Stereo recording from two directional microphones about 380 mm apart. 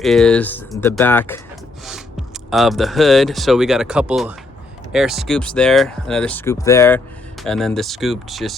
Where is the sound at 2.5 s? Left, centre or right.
Centre.